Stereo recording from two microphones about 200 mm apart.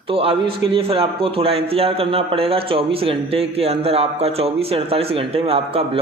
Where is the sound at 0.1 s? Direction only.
30° right (ahead or behind).